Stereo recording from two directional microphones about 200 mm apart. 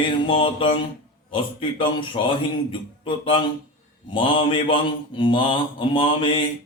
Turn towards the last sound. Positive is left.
turn(degrees=25)  # may be behind; listen again after turning